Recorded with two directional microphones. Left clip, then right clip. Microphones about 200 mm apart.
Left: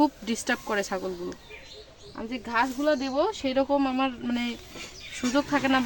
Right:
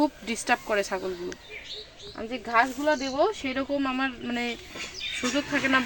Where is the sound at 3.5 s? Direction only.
50° left (ahead or behind).